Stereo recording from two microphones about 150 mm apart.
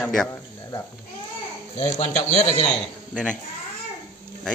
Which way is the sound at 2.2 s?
50° left (ahead or behind).